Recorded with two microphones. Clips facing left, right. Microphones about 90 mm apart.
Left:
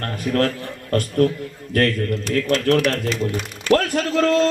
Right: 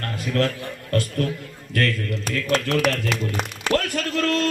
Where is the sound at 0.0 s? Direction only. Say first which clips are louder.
Left 3 dB; 40° left (ahead or behind).